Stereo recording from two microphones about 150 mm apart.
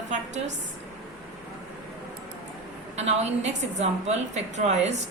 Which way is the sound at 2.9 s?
45° right (ahead or behind).